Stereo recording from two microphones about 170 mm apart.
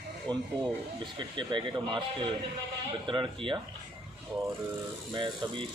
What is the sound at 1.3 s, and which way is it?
Speech, 25° right (ahead or behind).